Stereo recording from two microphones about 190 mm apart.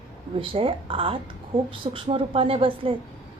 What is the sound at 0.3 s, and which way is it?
A woman's voice, 30° right (ahead or behind).